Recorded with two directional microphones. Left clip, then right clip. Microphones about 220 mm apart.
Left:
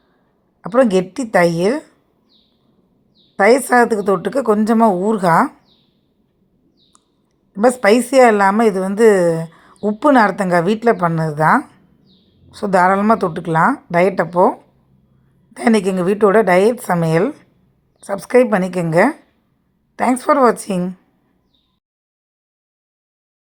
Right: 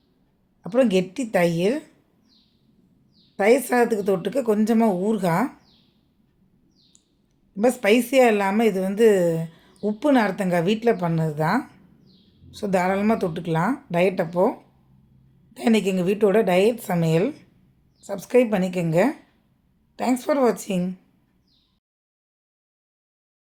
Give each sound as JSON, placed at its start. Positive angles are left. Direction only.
{"t": 0.6, "sound": "a woman's voice", "side_deg": 20}
{"t": 3.3, "sound": "a woman's voice", "side_deg": 20}
{"t": 7.5, "sound": "a woman's voice", "side_deg": 20}
{"t": 15.5, "sound": "a woman's voice", "side_deg": 25}